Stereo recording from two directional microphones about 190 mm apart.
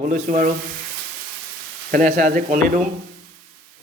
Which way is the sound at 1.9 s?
45° right (ahead or behind).